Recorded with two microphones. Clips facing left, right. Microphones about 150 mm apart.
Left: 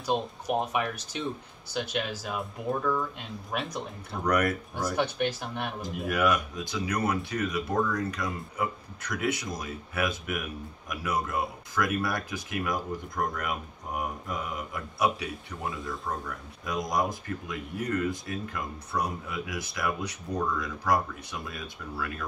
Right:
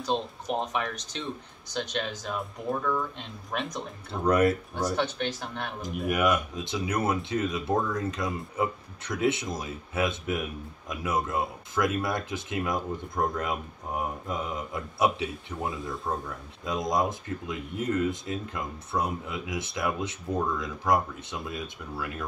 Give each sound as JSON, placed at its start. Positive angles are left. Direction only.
{"t": 0.0, "sound": "speech", "side_deg": 10}
{"t": 4.1, "sound": "speech", "side_deg": -25}
{"t": 4.9, "sound": "speech", "side_deg": 10}
{"t": 5.8, "sound": "speech", "side_deg": -20}